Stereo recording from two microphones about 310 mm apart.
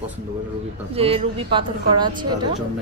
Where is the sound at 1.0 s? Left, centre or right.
Centre.